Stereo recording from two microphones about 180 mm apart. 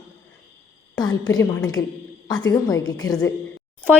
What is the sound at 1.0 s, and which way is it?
A woman's voice, 20° left (ahead or behind).